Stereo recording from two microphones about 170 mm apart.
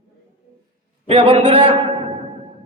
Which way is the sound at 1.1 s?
30° right (ahead or behind).